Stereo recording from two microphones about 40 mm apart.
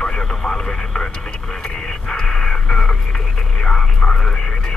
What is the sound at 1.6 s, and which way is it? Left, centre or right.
Radio, centre.